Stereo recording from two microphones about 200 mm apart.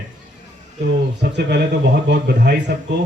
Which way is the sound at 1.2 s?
50° right (ahead or behind).